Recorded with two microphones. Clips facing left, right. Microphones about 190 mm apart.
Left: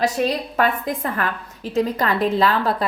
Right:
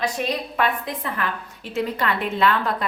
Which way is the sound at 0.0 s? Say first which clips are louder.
Left 4 dB; 40° left (ahead or behind).